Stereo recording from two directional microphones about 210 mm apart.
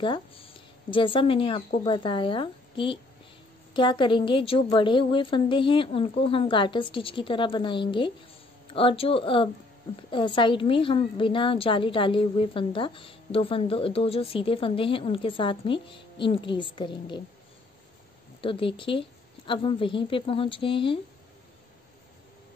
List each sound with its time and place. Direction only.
0.0 s a woman's voice: 25° left (ahead or behind)
18.4 s a woman's voice: 25° left (ahead or behind)